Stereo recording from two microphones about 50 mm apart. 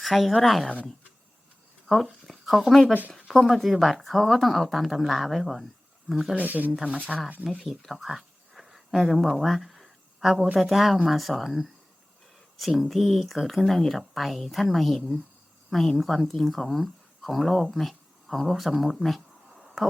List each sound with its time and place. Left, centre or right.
0.0 s a woman's voice: centre
1.9 s speech: centre
2.2 s a sound: centre
3.2 s speech: centre
6.3 s speech: right
7.8 s a sound: centre
10.6 s speech: centre